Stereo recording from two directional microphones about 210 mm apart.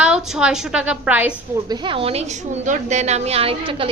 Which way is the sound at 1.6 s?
20° right (ahead or behind).